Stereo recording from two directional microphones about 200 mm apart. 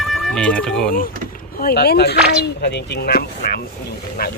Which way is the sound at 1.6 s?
50° left (ahead or behind).